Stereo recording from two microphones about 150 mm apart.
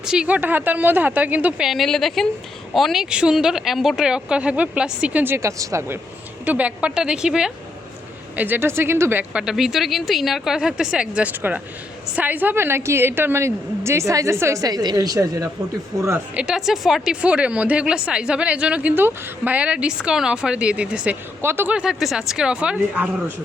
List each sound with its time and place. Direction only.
0.0 s speech: 5° right (ahead or behind)
6.4 s a woman's voice: 10° right (ahead or behind)